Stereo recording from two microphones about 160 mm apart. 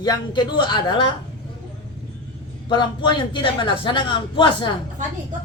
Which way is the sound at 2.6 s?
30° left (ahead or behind).